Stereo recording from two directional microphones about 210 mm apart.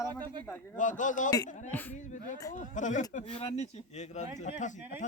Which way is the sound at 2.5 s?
35° left (ahead or behind).